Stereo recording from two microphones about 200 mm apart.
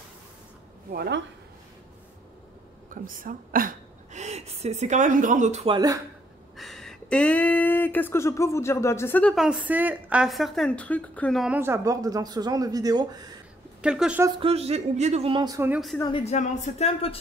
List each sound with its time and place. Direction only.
0.9 s speech: 55° right (ahead or behind)
2.9 s a woman's voice: 45° right (ahead or behind)
6.5 s speech: centre (ahead or behind); by 13.2 s 20° right (ahead or behind)
13.7 s speech: 5° right (ahead or behind)
14.4 s speech: 30° right (ahead or behind); by 15.8 s 15° right (ahead or behind)
16.3 s speech: 35° left (ahead or behind)